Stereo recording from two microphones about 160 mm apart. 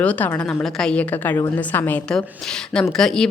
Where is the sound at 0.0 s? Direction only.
10° left (ahead or behind).